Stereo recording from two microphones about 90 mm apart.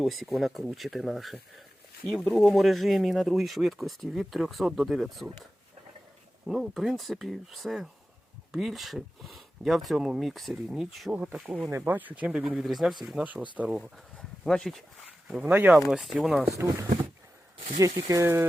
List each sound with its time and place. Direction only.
0.0 s speech: centre (ahead or behind)
6.5 s speech: centre (ahead or behind)
11.7 s speech: 20° right (ahead or behind)
12.6 s speech: centre (ahead or behind)
14.2 s a sound: 5° left (ahead or behind)
15.3 s speech: 10° right (ahead or behind)
16.5 s speech: 35° right (ahead or behind)